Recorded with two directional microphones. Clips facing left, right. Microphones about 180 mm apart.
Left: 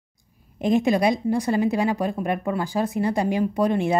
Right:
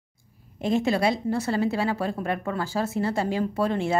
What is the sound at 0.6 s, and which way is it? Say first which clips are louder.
Speech: left 3 dB; 15° left (ahead or behind).